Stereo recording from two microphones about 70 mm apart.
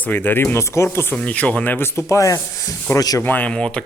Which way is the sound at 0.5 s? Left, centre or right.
Left.